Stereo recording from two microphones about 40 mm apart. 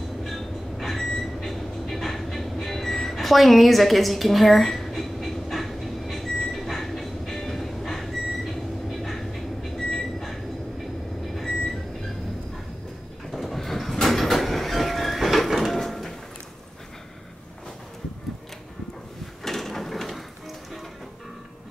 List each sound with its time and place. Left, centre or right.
0.2 s train: centre
6.3 s vehicle: centre
6.6 s train: centre
9.8 s vehicle: centre
10.2 s train: centre
11.3 s vehicle: centre
13.3 s train: centre
19.4 s music: centre